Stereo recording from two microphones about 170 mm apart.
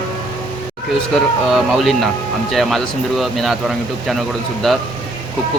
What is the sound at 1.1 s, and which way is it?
Speech, centre (ahead or behind).